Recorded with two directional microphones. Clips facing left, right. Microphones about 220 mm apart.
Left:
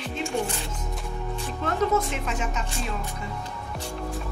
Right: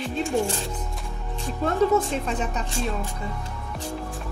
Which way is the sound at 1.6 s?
35° right (ahead or behind).